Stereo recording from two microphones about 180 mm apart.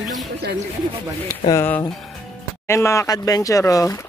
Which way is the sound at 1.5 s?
15° left (ahead or behind).